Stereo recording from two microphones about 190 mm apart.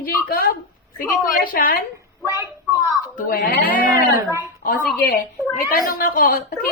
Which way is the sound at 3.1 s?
50° left (ahead or behind).